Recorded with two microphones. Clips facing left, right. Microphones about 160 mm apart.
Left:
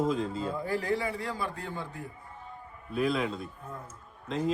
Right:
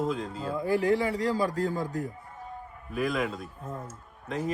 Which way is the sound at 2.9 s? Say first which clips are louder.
Even; 5° right (ahead or behind).